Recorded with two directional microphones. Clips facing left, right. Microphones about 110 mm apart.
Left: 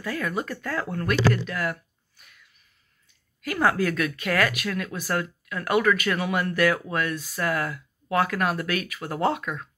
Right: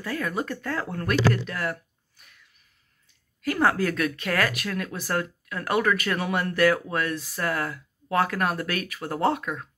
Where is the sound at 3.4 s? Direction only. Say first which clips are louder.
Even; 35° right (ahead or behind).